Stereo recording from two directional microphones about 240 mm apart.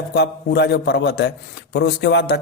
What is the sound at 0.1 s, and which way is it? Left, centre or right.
A man's voice, left.